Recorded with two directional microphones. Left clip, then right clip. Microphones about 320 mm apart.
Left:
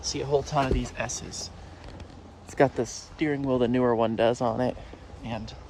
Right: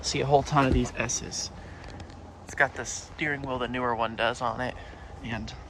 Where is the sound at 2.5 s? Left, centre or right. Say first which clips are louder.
Left 3 dB; centre.